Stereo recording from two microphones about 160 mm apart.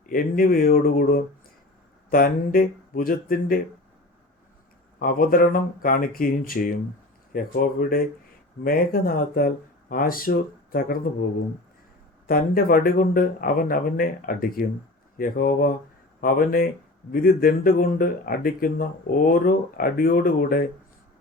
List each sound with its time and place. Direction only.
0.1 s speech: 60° left (ahead or behind)
4.9 s speech: 65° left (ahead or behind)
12.3 s speech: 65° left (ahead or behind)